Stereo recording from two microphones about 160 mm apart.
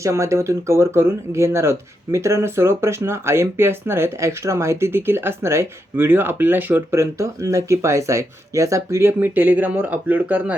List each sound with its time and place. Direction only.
0.0 s speech: 20° right (ahead or behind)